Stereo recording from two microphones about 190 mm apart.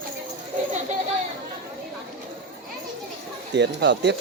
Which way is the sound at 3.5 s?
65° right (ahead or behind).